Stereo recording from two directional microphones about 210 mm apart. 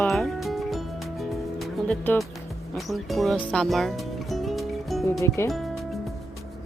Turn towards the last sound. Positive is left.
turn(degrees=0)  # may be behind; listen again after turning